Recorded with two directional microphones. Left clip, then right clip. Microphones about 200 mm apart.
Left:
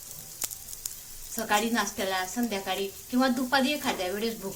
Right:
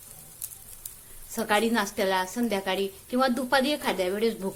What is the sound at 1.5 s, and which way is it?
A woman's voice, 45° right (ahead or behind).